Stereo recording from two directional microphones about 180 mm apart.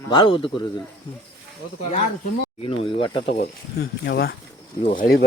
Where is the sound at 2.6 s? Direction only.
30° left (ahead or behind).